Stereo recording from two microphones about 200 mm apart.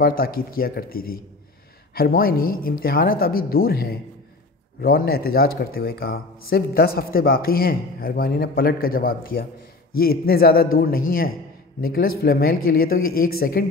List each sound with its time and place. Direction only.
0.0 s speech: 45° left (ahead or behind)